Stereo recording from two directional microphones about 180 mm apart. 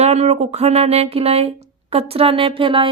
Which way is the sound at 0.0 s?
35° right (ahead or behind).